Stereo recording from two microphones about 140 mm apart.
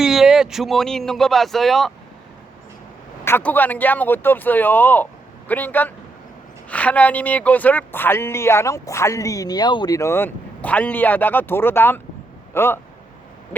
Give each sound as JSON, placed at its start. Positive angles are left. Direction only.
{"t": 0.0, "sound": "speech", "side_deg": -5}
{"t": 3.2, "sound": "speech", "side_deg": 15}